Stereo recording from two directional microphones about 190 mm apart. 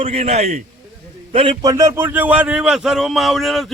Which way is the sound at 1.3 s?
25° right (ahead or behind).